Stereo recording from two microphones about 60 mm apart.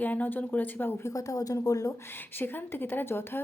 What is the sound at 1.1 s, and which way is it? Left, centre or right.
Speech, left.